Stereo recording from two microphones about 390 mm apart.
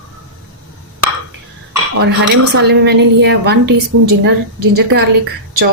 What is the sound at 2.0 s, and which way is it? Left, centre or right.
A woman's voice, right.